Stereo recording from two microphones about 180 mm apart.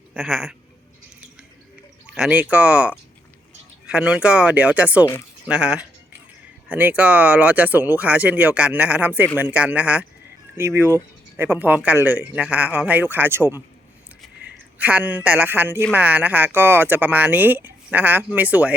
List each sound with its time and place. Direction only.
0.1 s speech: centre (ahead or behind)
2.0 s speech: 5° right (ahead or behind)
14.8 s speech: 10° right (ahead or behind)